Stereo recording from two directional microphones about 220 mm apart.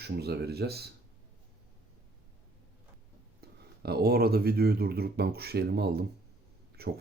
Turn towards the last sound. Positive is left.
turn(degrees=-45)  # may be behind; listen again after turning